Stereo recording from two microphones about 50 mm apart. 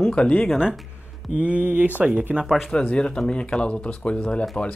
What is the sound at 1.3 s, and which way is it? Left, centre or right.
Speech, right.